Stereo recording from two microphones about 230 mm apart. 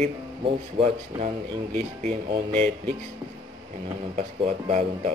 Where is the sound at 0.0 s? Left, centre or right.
Right.